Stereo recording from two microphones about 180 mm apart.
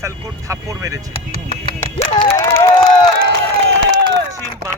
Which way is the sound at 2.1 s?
20° left (ahead or behind).